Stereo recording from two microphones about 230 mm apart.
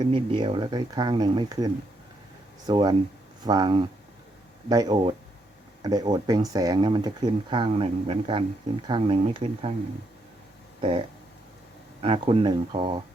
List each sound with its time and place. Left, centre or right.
0.0 s speech: right
10.8 s a sound: right
12.0 s speech: right